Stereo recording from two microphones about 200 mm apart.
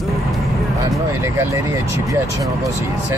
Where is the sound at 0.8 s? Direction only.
15° right (ahead or behind).